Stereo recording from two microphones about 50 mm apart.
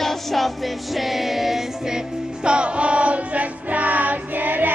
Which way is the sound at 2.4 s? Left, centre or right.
Right.